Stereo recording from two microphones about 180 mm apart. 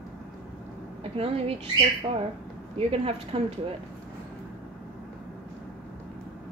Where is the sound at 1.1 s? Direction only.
30° right (ahead or behind).